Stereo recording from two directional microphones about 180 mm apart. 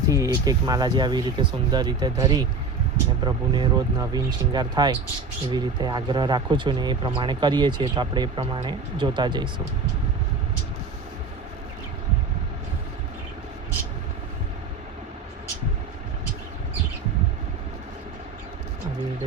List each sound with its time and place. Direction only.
0.1 s speech: 20° right (ahead or behind)